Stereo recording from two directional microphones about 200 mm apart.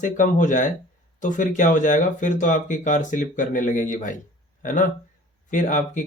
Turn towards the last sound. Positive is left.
turn(degrees=40)  # may be behind; listen again after turning